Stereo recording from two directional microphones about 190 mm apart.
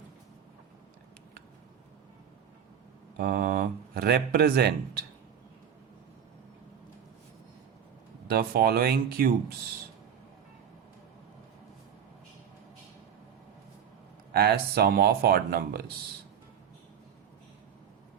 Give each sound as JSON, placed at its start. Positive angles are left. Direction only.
{"t": 3.2, "sound": "speech", "side_deg": -50}
{"t": 8.3, "sound": "speech", "side_deg": -55}
{"t": 14.3, "sound": "speech", "side_deg": -55}